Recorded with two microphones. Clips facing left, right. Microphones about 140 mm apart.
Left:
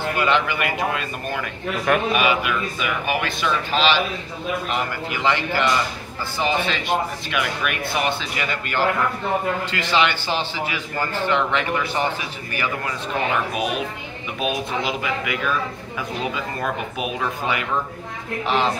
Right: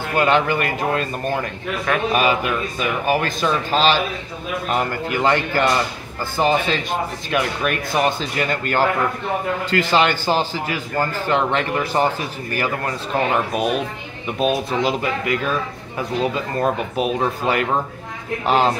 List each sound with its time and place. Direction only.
0.2 s a man's voice: 45° right (ahead or behind)
14.4 s speech: 40° right (ahead or behind)